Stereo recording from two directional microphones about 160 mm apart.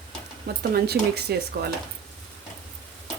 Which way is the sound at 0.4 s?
75° right (ahead or behind).